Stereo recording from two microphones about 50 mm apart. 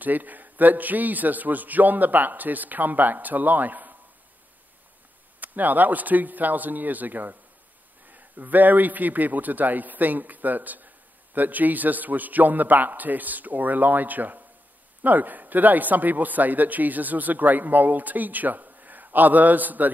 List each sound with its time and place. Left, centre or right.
0.0 s speech: right
5.4 s speech: right